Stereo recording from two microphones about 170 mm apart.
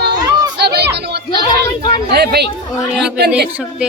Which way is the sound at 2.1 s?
70° right (ahead or behind).